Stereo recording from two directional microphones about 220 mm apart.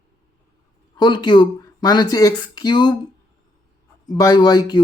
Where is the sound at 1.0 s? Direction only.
20° left (ahead or behind).